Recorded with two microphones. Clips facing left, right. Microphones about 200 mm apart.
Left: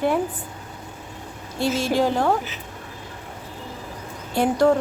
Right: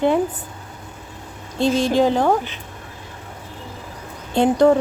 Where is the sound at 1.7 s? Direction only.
20° right (ahead or behind).